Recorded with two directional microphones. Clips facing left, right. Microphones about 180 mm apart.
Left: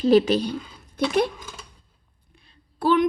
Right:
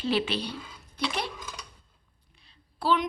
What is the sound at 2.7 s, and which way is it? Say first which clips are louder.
Speech: left 7 dB; 50° left (ahead or behind).